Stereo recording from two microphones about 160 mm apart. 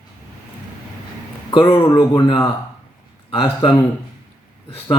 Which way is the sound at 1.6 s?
20° left (ahead or behind).